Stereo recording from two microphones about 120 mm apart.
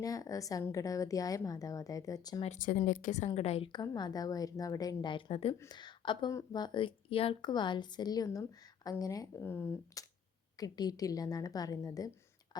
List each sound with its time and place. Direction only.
0.0 s a woman's voice: 30° left (ahead or behind)
2.4 s a woman's voice: 85° left; by 3.7 s 60° left (ahead or behind)
3.7 s speech: 35° left (ahead or behind)
5.1 s a woman's voice: 55° left (ahead or behind)
5.5 s speech: 35° left (ahead or behind)